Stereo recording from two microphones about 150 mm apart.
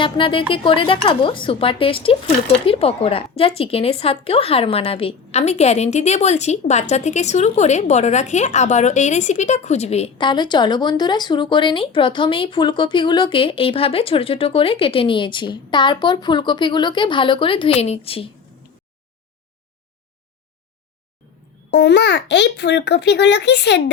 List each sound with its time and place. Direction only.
0.0 s a woman's voice: 35° left (ahead or behind)
10.2 s speech: 30° left (ahead or behind)
22.6 s speech: 90° left